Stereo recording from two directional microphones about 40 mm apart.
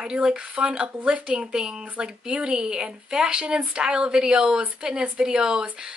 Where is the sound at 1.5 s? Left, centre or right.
Right.